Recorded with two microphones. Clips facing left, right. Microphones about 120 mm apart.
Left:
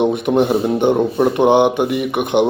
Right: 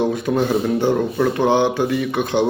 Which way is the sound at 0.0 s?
20° left (ahead or behind).